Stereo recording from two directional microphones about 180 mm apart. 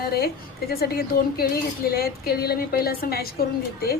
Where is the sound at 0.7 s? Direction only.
60° left (ahead or behind).